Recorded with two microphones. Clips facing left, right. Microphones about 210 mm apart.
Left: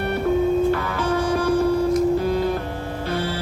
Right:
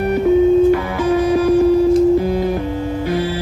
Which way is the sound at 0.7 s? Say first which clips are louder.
Right 7 dB; 15° right (ahead or behind).